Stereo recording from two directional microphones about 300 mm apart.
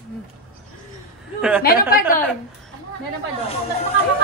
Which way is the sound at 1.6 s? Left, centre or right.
Left.